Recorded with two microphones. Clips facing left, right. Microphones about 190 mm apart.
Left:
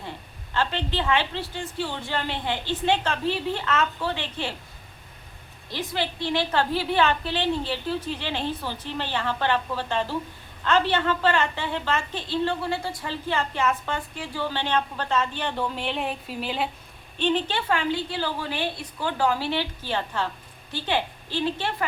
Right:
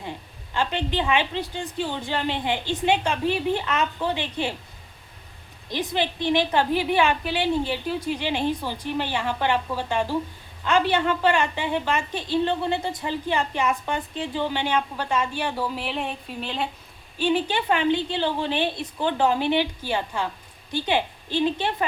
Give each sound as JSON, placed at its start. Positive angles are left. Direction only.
{"t": 0.5, "sound": "a woman's voice", "side_deg": -15}
{"t": 5.7, "sound": "a woman's voice", "side_deg": -20}
{"t": 17.2, "sound": "a woman's voice", "side_deg": -10}